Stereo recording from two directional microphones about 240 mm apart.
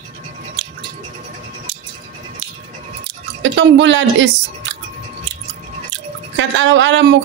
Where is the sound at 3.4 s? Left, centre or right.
Right.